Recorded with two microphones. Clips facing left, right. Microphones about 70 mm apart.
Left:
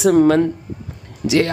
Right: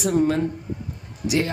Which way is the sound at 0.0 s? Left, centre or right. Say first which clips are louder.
Left 8 dB; left.